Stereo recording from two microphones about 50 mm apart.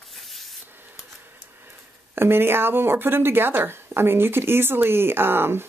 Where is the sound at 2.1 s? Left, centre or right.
Right.